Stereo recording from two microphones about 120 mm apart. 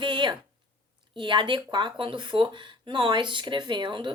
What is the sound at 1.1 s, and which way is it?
Speech, 40° right (ahead or behind).